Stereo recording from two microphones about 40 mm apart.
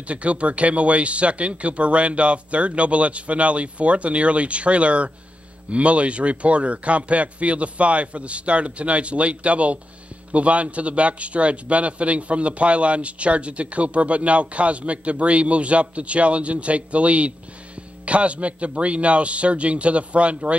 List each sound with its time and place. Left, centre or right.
0.1 s a man's voice: right